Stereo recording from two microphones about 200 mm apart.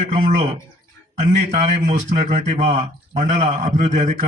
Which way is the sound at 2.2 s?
30° right (ahead or behind).